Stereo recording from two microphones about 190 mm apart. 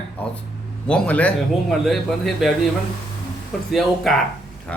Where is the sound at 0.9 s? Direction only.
5° left (ahead or behind).